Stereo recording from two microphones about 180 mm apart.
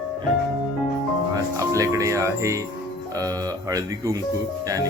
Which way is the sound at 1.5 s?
15° right (ahead or behind).